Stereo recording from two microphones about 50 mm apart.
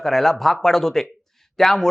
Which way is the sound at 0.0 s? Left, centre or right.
Centre.